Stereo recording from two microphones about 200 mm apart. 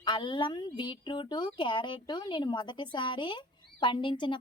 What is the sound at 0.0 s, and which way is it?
Speech, 25° left (ahead or behind).